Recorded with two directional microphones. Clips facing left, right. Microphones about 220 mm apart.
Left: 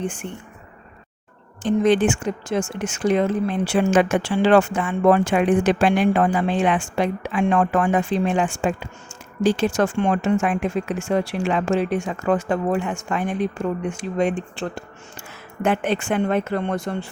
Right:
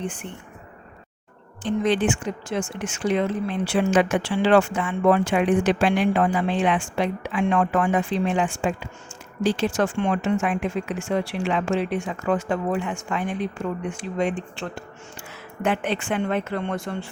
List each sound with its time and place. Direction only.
1.6 s speech: 45° left (ahead or behind)